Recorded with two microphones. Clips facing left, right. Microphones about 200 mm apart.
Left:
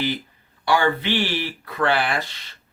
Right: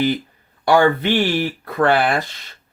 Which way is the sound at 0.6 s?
50° right (ahead or behind).